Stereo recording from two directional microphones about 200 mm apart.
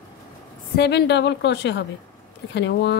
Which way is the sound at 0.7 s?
55° left (ahead or behind).